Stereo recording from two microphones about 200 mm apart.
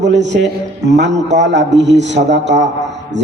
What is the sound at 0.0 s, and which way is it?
A man's voice, 60° right (ahead or behind).